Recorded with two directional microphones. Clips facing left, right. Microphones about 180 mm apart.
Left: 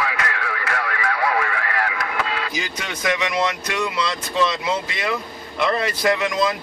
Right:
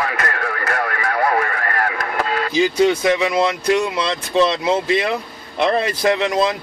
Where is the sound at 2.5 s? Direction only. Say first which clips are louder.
Right 14 dB; 30° right (ahead or behind).